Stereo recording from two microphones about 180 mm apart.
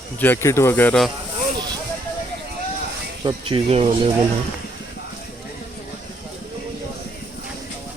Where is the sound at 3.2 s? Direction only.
30° right (ahead or behind).